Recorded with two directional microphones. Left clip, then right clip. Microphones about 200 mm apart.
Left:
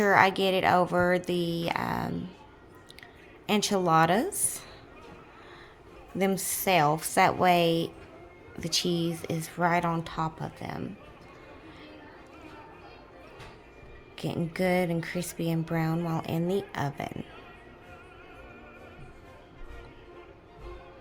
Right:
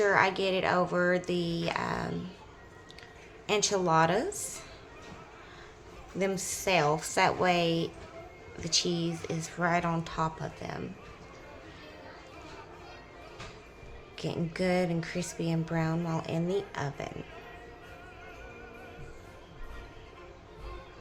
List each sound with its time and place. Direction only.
0.0 s speech: 55° left (ahead or behind)
3.4 s speech: 50° left (ahead or behind)
6.1 s speech: 55° left (ahead or behind)
14.2 s speech: 50° left (ahead or behind)